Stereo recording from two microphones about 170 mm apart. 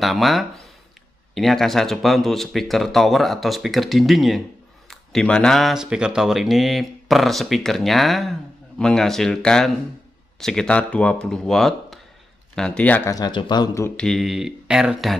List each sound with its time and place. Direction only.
0.0 s speech: centre (ahead or behind)
13.1 s speech: 25° left (ahead or behind)
13.8 s speech: 5° left (ahead or behind)